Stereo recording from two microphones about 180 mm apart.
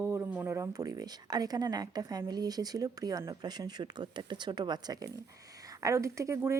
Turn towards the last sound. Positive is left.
turn(degrees=-15)  # may be behind; listen again after turning